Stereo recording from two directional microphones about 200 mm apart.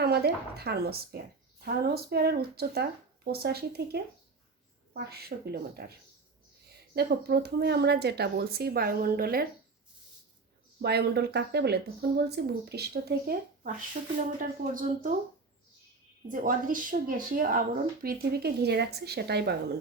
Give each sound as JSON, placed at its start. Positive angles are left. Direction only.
{"t": 0.0, "sound": "a woman's voice", "side_deg": -50}
{"t": 5.0, "sound": "a woman's voice", "side_deg": -50}
{"t": 10.8, "sound": "a woman's voice", "side_deg": -55}
{"t": 16.3, "sound": "a woman's voice", "side_deg": -40}